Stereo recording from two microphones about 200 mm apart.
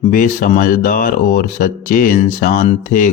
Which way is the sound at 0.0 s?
40° left (ahead or behind).